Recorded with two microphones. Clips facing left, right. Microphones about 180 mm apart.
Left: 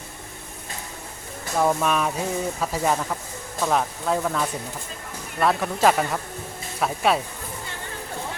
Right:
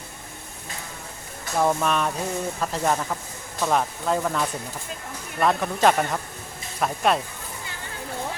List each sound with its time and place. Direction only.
1.5 s speech: centre (ahead or behind)